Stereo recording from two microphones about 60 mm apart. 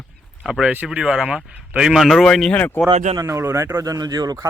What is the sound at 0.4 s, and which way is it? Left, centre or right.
Speech, centre.